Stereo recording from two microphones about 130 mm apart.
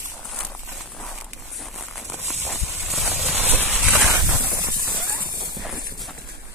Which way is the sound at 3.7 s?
Centre (ahead or behind).